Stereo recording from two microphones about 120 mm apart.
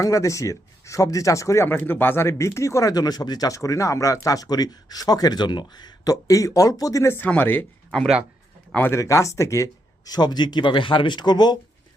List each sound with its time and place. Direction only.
0.0 s speech: 25° left (ahead or behind); by 8.1 s 5° left (ahead or behind)
8.7 s speech: 20° left (ahead or behind); by 11.5 s 35° left (ahead or behind)